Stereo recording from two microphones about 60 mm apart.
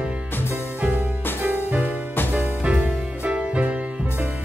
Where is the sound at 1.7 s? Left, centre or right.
Right.